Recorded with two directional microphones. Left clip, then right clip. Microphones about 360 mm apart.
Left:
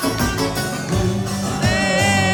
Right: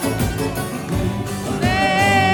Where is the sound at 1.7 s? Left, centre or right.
Centre.